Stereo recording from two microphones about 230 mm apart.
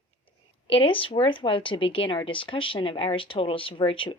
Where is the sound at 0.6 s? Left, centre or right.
Left.